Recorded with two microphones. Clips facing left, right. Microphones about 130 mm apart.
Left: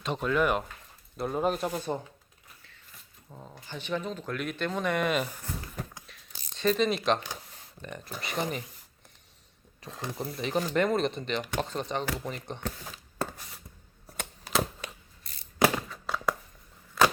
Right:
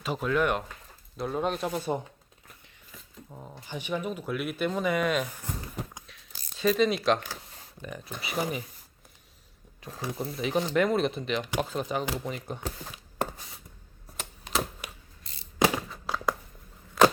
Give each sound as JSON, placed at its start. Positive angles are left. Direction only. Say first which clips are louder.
{"t": 0.0, "sound": "speech", "louder": "even", "side_deg": -5}
{"t": 1.7, "sound": "speech", "louder": "right 2 dB", "side_deg": -10}
{"t": 3.2, "sound": "speech", "louder": "right 1 dB", "side_deg": -10}
{"t": 6.1, "sound": "a sound", "louder": "even", "side_deg": 0}
{"t": 7.8, "sound": "speech", "louder": "right 1 dB", "side_deg": -5}
{"t": 9.8, "sound": "speech", "louder": "right 2 dB", "side_deg": -5}
{"t": 14.2, "sound": "typewriter", "louder": "left 2 dB", "side_deg": -5}
{"t": 15.2, "sound": "a sound", "louder": "right 2 dB", "side_deg": -25}
{"t": 15.9, "sound": "a sound", "louder": "right 1 dB", "side_deg": 0}